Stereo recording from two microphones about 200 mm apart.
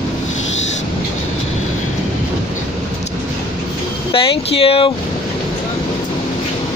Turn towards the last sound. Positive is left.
turn(degrees=25)  # may be behind; listen again after turning